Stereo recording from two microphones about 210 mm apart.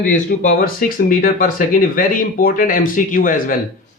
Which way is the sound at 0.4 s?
45° left (ahead or behind).